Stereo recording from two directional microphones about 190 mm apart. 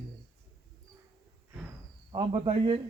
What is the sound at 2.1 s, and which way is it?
Speech, 25° right (ahead or behind).